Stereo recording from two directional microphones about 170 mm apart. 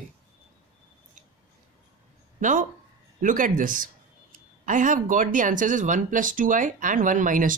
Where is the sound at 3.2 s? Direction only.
50° right (ahead or behind).